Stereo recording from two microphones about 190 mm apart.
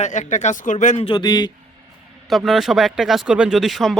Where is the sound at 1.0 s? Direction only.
20° left (ahead or behind).